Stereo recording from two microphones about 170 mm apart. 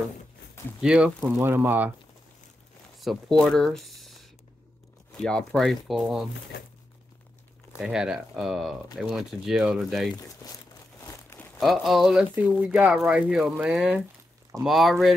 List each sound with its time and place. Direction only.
0.7 s speech: 5° right (ahead or behind)
3.0 s speech: centre (ahead or behind)
5.1 s speech: 5° left (ahead or behind)
7.8 s speech: 5° right (ahead or behind)
11.0 s crumpling: 15° left (ahead or behind)
11.6 s speech: centre (ahead or behind)